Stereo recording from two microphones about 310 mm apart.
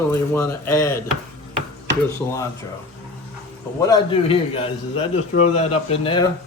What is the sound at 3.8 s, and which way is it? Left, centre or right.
A man's voice, centre.